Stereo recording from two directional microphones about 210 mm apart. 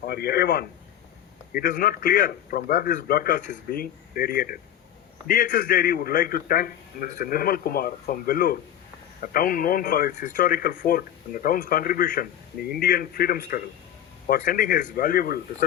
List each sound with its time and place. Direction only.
0.0 s a man's voice: 50° left (ahead or behind)